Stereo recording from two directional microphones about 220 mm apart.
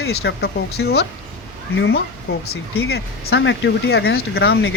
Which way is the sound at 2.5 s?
45° left (ahead or behind).